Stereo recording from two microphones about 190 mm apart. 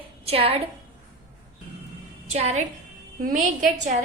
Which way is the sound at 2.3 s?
35° right (ahead or behind).